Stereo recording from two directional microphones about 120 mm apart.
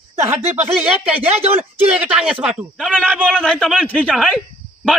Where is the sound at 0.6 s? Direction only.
10° right (ahead or behind).